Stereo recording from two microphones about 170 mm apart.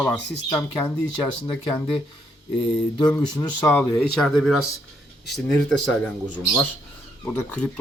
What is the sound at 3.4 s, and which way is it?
Speech, 20° left (ahead or behind).